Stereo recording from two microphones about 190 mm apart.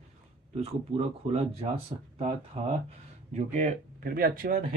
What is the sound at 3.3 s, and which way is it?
Speech, 40° right (ahead or behind).